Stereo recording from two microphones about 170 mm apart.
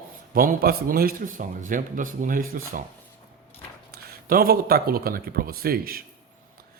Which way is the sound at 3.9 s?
60° right (ahead or behind).